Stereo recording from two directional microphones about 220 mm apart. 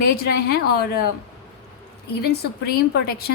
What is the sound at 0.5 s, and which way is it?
Speech, 45° left (ahead or behind).